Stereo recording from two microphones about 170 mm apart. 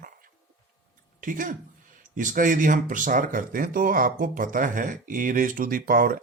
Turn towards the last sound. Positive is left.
turn(degrees=-60)  # may be behind; listen again after turning